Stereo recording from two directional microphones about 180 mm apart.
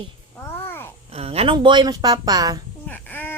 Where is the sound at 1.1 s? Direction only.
35° right (ahead or behind).